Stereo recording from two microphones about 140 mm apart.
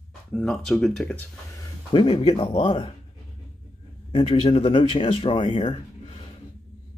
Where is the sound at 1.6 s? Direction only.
35° left (ahead or behind).